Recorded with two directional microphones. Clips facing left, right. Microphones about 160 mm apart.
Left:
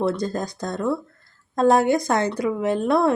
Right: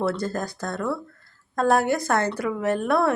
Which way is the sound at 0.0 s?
15° left (ahead or behind).